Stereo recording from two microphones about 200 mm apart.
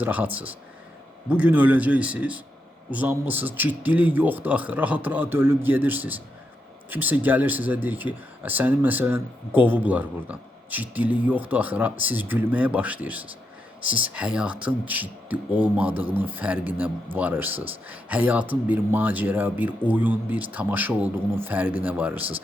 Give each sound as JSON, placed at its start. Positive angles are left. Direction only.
{"t": 0.0, "sound": "speech", "side_deg": -10}